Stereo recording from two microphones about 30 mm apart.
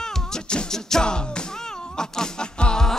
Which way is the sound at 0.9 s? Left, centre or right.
Centre.